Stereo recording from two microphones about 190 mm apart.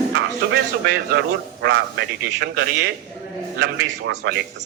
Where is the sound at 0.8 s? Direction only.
65° right (ahead or behind).